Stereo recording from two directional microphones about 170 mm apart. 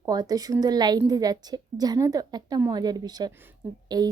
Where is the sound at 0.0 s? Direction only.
20° right (ahead or behind).